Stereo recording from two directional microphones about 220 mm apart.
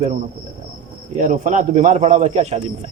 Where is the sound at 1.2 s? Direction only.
35° right (ahead or behind).